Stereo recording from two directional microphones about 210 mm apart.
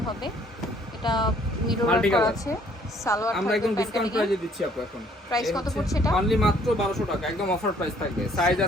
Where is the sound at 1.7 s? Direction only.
5° left (ahead or behind).